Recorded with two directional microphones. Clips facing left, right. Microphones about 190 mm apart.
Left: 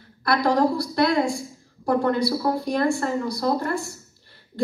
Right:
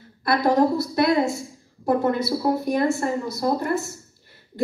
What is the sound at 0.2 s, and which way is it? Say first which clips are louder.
A woman's voice: right 1 dB; 20° right (ahead or behind).